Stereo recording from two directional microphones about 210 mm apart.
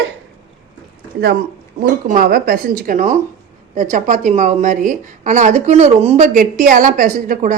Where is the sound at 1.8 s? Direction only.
45° right (ahead or behind).